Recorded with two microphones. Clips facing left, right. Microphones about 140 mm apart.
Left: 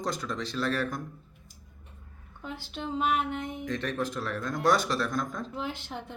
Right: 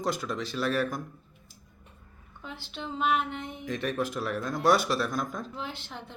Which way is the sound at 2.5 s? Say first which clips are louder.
Left 4 dB; 45° left (ahead or behind).